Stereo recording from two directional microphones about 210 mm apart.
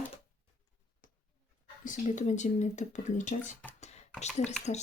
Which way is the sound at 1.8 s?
35° left (ahead or behind).